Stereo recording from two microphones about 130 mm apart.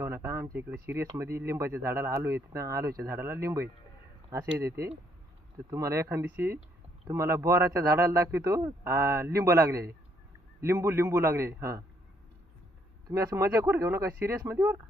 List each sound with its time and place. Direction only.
0.0 s a man's voice: 20° right (ahead or behind)
13.1 s a man's voice: 25° right (ahead or behind)